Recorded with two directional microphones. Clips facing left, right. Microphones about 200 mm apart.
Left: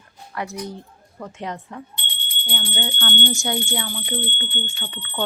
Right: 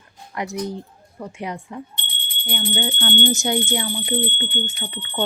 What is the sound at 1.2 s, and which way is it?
Speech, 10° right (ahead or behind).